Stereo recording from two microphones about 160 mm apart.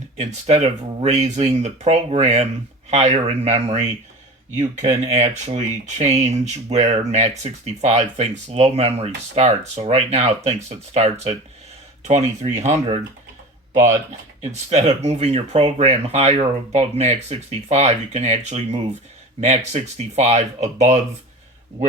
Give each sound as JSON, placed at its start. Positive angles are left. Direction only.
{"t": 0.2, "sound": "speech", "side_deg": -45}
{"t": 14.5, "sound": "speech", "side_deg": -45}